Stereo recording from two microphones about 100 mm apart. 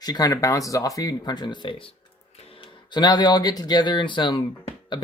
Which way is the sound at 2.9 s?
45° left (ahead or behind).